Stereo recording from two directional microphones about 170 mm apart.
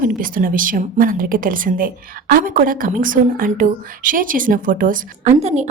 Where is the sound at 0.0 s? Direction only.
55° right (ahead or behind).